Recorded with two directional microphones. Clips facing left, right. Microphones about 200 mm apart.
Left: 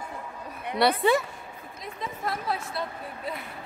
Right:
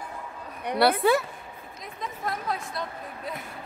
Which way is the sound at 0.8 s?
Centre (ahead or behind).